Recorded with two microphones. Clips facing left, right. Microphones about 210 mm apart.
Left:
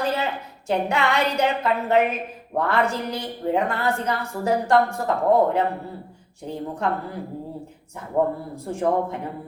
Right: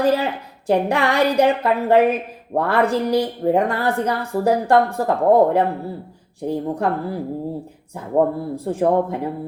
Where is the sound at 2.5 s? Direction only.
35° right (ahead or behind).